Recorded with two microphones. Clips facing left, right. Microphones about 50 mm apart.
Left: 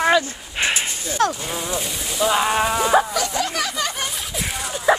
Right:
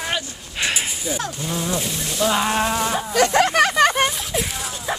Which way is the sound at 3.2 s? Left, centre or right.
Right.